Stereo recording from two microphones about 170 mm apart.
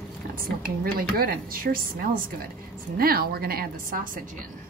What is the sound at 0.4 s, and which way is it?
A woman's voice, 60° right (ahead or behind).